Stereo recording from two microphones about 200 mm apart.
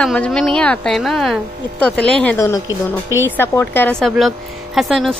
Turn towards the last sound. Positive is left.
turn(degrees=0)  # may be behind; listen again after turning